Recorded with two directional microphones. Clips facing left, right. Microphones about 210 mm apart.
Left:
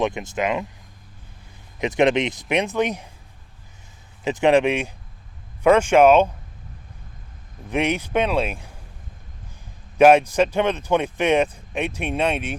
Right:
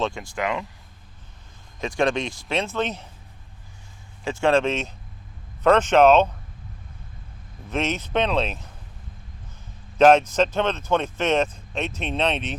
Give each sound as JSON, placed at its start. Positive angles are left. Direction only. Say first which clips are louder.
{"t": 0.0, "sound": "speech", "louder": "left 3 dB", "side_deg": 20}
{"t": 1.8, "sound": "speech", "louder": "left 5 dB", "side_deg": 20}
{"t": 4.2, "sound": "speech", "louder": "left 3 dB", "side_deg": 20}
{"t": 7.7, "sound": "speech", "louder": "left 3 dB", "side_deg": 15}
{"t": 10.0, "sound": "speech", "louder": "left 2 dB", "side_deg": 10}